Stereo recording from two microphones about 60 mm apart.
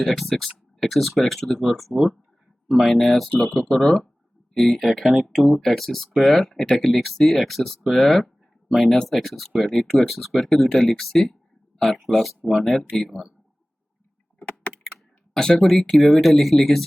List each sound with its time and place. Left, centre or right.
0.0 s speech: centre
13.1 s speech: centre
14.3 s computer keyboard: left
14.9 s clicking: centre
16.0 s speech: centre